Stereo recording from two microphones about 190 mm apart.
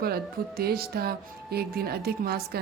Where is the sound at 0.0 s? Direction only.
55° right (ahead or behind).